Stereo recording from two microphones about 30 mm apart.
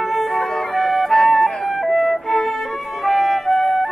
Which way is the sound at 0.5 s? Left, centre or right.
Centre.